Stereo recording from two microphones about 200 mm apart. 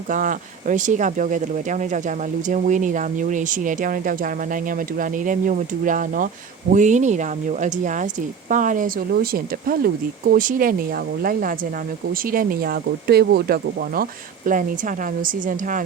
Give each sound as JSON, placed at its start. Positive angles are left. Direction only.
{"t": 0.1, "sound": "speech", "side_deg": -40}